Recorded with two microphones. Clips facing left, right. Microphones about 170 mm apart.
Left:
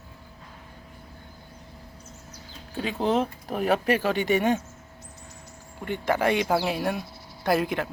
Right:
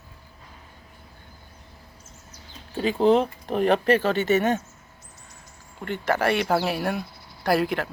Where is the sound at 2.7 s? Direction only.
Centre (ahead or behind).